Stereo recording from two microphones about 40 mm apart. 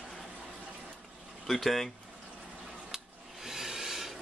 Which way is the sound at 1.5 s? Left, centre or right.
Centre.